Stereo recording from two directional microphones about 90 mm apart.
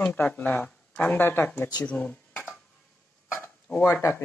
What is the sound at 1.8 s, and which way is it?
Speech, 15° left (ahead or behind).